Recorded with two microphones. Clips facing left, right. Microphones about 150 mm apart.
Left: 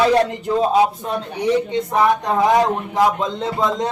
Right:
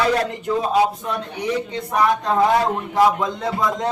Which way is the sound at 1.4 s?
20° left (ahead or behind).